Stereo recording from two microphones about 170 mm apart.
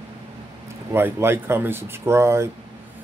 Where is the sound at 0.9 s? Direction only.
15° right (ahead or behind).